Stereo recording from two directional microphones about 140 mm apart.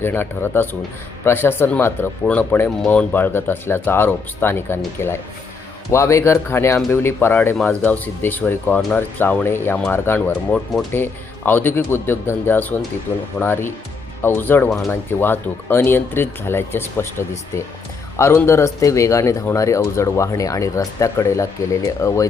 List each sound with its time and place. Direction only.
0.0 s speech: 15° left (ahead or behind)